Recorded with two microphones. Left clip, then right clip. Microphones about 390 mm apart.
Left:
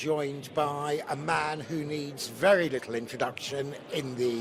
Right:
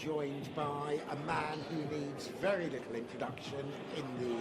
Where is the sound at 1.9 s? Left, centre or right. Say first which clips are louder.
Left 5 dB; left.